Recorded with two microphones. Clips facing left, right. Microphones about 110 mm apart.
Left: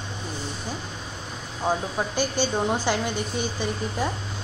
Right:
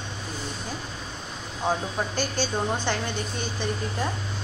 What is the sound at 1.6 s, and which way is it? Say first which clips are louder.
Speech: left 1 dB; centre (ahead or behind).